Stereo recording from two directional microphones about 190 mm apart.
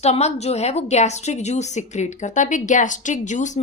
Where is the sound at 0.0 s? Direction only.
35° left (ahead or behind).